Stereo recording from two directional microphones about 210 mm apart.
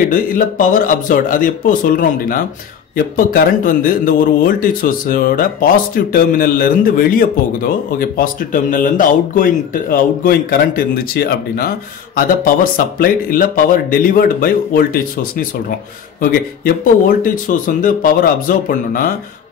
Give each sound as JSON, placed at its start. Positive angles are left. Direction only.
{"t": 0.1, "sound": "speech", "side_deg": 40}
{"t": 12.7, "sound": "speech", "side_deg": 40}